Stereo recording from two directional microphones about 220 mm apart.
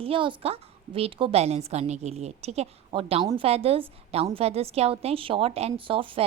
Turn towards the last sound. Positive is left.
turn(degrees=-25)  # may be behind; listen again after turning